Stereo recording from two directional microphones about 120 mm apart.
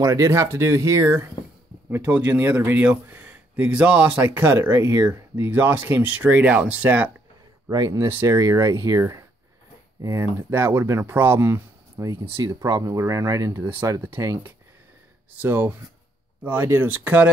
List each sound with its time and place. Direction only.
0.0 s speech: 25° right (ahead or behind)
1.9 s a man's voice: 15° right (ahead or behind)
7.7 s a man's voice: 30° right (ahead or behind); by 17.3 s 15° right (ahead or behind)